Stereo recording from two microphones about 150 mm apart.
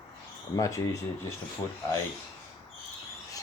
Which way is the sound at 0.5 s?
20° left (ahead or behind).